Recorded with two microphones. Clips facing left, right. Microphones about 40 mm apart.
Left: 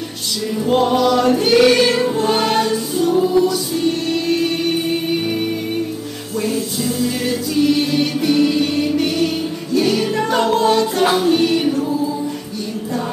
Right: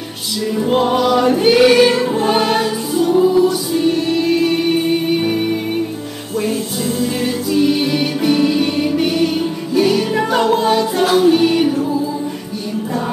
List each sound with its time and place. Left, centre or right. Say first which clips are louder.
0.6 s music: even; centre
6.4 s music: even; right